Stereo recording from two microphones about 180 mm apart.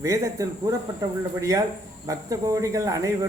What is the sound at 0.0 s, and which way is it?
Speech, 20° right (ahead or behind).